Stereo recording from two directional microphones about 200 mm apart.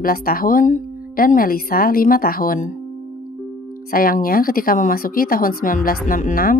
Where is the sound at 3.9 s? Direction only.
45° left (ahead or behind).